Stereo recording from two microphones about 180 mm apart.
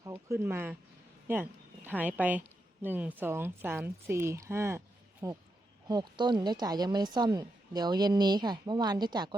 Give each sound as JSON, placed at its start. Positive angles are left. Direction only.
{"t": 0.0, "sound": "a woman's voice", "side_deg": -15}